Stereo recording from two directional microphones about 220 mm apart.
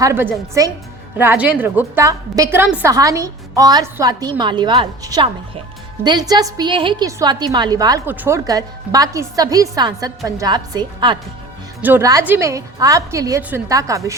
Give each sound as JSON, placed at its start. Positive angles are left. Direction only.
{"t": 0.0, "sound": "a woman's voice", "side_deg": -10}
{"t": 11.8, "sound": "a woman's voice", "side_deg": -10}